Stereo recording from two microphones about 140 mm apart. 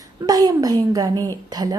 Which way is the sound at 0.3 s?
30° right (ahead or behind).